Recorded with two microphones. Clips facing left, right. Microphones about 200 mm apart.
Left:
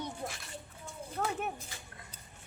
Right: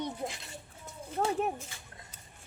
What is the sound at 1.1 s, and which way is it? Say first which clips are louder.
Speech: right 5 dB; 30° right (ahead or behind).